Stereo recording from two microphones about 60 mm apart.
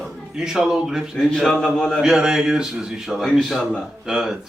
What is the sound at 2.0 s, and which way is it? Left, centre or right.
Speech, centre.